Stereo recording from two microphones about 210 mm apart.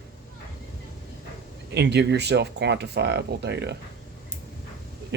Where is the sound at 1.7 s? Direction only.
55° right (ahead or behind).